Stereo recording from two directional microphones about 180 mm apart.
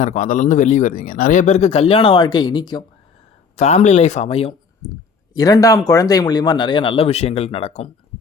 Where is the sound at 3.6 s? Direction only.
40° left (ahead or behind).